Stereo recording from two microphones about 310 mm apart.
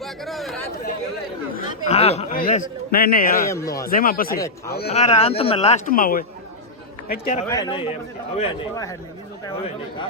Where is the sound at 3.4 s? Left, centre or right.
Centre.